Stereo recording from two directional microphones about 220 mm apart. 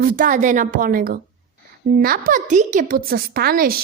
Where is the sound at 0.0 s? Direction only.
40° right (ahead or behind).